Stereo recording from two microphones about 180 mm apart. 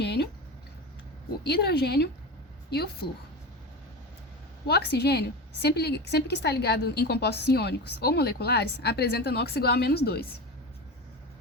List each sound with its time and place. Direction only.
0.0 s a sound: 65° left (ahead or behind)
1.5 s a woman's voice: 65° left (ahead or behind)
4.6 s a woman's voice: 65° left (ahead or behind)